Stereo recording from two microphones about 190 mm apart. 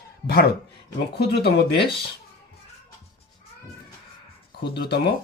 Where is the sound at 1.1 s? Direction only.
60° left (ahead or behind).